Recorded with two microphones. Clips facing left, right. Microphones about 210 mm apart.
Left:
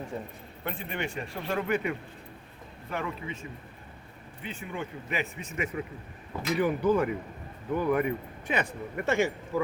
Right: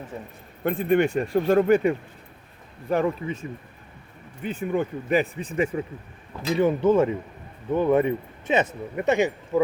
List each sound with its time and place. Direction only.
0.6 s speech: 50° right (ahead or behind)
4.4 s speech: 50° right (ahead or behind); by 9.3 s 20° right (ahead or behind)